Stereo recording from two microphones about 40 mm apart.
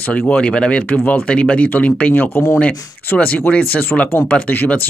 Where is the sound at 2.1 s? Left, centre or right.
Left.